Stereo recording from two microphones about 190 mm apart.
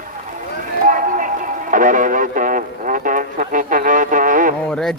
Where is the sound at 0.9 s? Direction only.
45° right (ahead or behind).